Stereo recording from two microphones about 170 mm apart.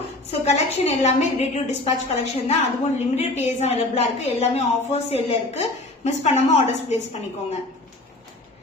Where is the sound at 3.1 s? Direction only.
40° left (ahead or behind).